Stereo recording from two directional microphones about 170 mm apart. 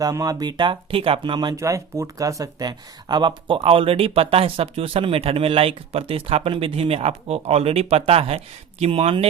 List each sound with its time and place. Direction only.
0.0 s speech: 20° right (ahead or behind)